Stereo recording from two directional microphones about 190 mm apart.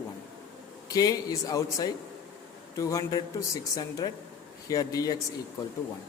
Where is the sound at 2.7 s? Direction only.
15° left (ahead or behind).